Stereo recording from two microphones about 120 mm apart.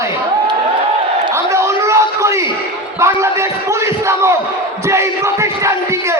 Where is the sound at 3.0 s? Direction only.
25° right (ahead or behind).